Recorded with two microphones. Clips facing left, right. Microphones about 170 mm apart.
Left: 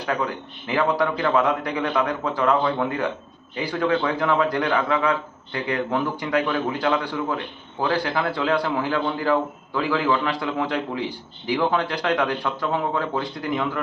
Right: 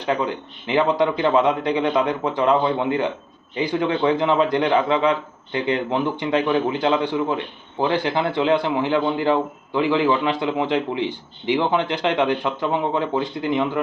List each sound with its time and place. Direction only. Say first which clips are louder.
0.0 s a man's voice: right 3 dB; 20° right (ahead or behind)